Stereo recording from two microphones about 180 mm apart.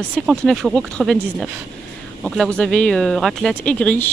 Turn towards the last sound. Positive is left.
turn(degrees=5)  # may be behind; listen again after turning